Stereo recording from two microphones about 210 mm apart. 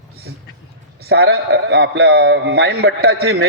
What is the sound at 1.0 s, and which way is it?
A man's voice, 50° right (ahead or behind).